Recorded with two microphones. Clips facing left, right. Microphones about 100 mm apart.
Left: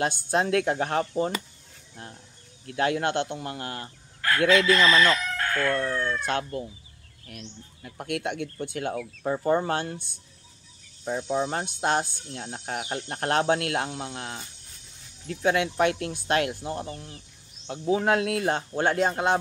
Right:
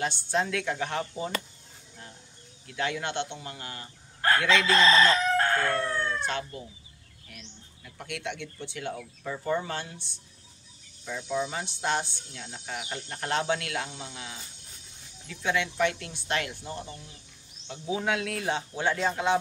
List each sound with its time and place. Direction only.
0.0 s speech: 45° left (ahead or behind)
2.6 s speech: 45° left (ahead or behind)
4.6 s fowl: 30° right (ahead or behind)
5.8 s speech: 40° left (ahead or behind)
11.1 s cricket: 40° left (ahead or behind)
11.5 s speech: 50° left (ahead or behind)